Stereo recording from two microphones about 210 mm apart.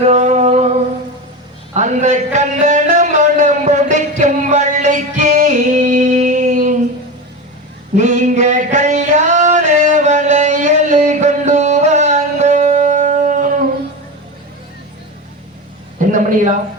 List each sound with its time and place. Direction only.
0.0 s music: 35° right (ahead or behind)
1.7 s a sound: 35° right (ahead or behind)
7.9 s music: 35° right (ahead or behind)